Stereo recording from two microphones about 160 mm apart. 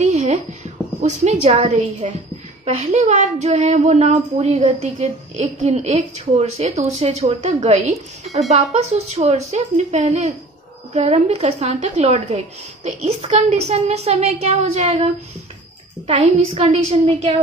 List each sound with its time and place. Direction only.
0.0 s a sound: 45° right (ahead or behind)
1.0 s a woman's voice: 45° right (ahead or behind)
2.6 s a woman's voice: 40° right (ahead or behind)
16.1 s a woman's voice: 40° right (ahead or behind)